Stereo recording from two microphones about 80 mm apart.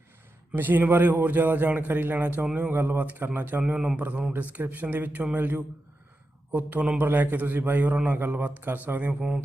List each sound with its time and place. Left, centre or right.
0.5 s a man's voice: right
3.8 s speech: centre
4.3 s a man's voice: right